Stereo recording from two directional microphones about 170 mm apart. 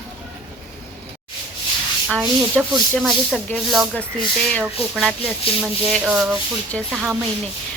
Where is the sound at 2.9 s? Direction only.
Centre (ahead or behind).